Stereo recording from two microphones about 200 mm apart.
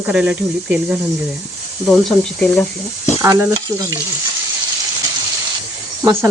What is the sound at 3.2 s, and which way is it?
Speech, 15° right (ahead or behind).